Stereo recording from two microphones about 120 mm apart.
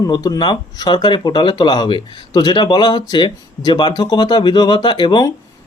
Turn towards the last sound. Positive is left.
turn(degrees=40)  # may be behind; listen again after turning